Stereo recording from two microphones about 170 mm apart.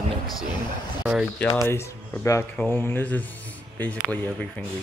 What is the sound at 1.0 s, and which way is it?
Speech, 5° right (ahead or behind).